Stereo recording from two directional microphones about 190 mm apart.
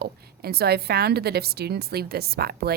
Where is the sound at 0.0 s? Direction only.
55° right (ahead or behind).